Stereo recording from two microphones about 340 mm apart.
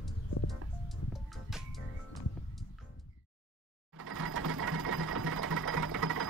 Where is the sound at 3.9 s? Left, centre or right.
Right.